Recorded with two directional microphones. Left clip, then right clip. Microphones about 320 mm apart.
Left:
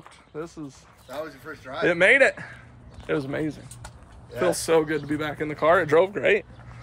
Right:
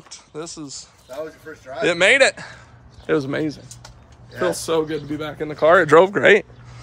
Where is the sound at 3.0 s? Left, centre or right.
Right.